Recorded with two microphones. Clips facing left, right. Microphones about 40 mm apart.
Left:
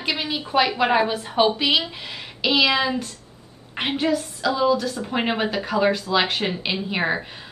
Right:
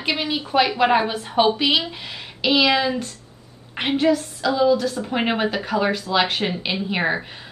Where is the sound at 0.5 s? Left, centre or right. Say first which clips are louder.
Right 1 dB; centre.